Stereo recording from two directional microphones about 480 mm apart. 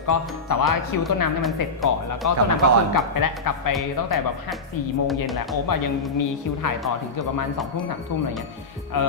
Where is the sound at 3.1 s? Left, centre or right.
Left.